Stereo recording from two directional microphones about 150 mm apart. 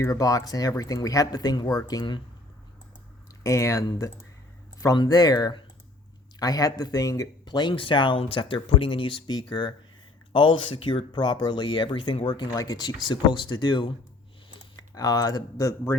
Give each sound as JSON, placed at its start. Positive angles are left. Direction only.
{"t": 0.0, "sound": "speech", "side_deg": 25}
{"t": 3.4, "sound": "speech", "side_deg": 20}